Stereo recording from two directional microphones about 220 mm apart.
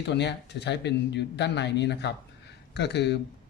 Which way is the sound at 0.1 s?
50° left (ahead or behind).